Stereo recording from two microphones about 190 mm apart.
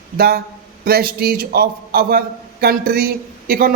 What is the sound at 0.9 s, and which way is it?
A man's voice, 55° right (ahead or behind).